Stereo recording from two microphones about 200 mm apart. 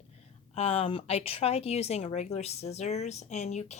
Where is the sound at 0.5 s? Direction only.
30° left (ahead or behind).